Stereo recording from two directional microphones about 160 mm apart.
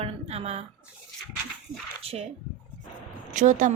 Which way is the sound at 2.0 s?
40° right (ahead or behind).